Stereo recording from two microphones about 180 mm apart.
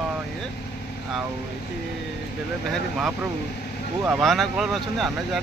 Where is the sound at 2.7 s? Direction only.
5° right (ahead or behind).